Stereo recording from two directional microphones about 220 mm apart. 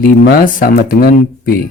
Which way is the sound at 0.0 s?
40° left (ahead or behind).